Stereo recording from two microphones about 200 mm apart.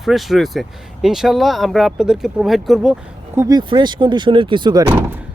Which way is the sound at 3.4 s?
20° right (ahead or behind).